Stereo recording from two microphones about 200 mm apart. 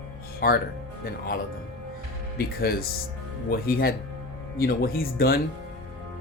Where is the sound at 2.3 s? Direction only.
50° left (ahead or behind).